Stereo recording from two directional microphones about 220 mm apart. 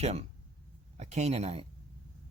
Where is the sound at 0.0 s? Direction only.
30° right (ahead or behind).